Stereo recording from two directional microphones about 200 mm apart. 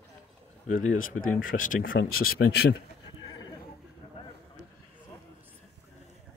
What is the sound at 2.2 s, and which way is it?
Speech, 50° left (ahead or behind).